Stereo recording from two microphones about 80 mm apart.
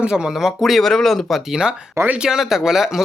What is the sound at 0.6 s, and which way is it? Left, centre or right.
Speech, centre.